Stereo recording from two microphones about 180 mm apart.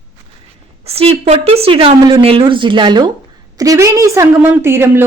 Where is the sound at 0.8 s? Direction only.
35° right (ahead or behind).